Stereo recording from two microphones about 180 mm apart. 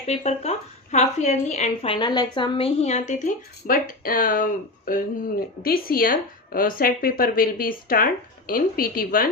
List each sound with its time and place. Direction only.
0.1 s a woman's voice: 35° left (ahead or behind); by 9.2 s 55° left (ahead or behind)